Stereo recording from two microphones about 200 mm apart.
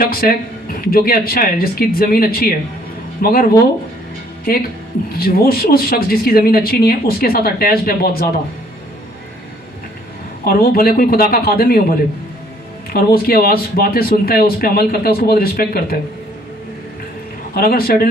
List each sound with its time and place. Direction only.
0.0 s speech: 50° left (ahead or behind)
10.4 s speech: 50° left (ahead or behind)
17.5 s speech: 50° left (ahead or behind)